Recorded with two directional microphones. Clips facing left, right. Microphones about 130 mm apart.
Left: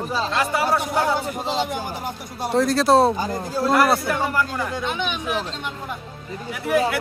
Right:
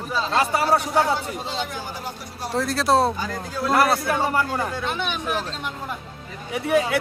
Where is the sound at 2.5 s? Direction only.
Centre (ahead or behind).